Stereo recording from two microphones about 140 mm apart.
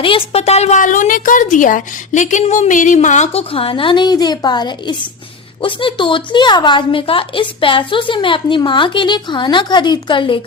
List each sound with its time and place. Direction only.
0.0 s a woman's voice: 45° left (ahead or behind)